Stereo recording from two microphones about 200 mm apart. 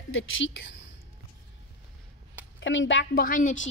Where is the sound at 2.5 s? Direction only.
65° left (ahead or behind); by 3.6 s 45° left (ahead or behind).